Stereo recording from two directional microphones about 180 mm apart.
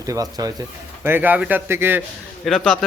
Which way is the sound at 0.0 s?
20° right (ahead or behind).